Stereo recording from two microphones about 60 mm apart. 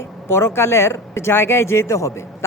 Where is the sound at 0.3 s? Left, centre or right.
Left.